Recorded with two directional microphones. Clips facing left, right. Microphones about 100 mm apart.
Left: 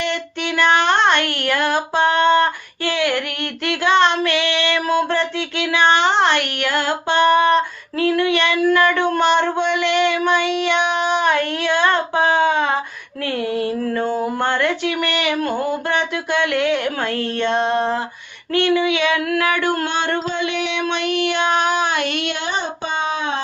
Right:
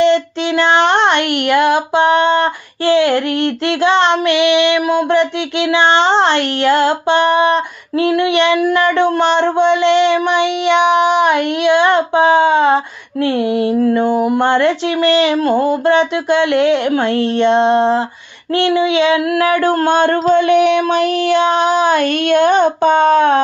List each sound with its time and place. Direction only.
0.0 s female singing: 25° right (ahead or behind); by 23.4 s 55° right (ahead or behind)